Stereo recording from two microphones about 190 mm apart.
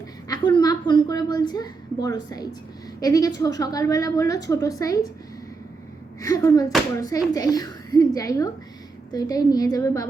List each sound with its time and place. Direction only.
0.3 s a woman's voice: 20° left (ahead or behind)
6.1 s a child's voice: 15° left (ahead or behind)